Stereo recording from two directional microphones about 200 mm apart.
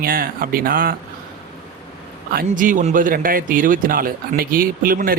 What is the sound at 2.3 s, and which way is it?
Speech, 45° right (ahead or behind).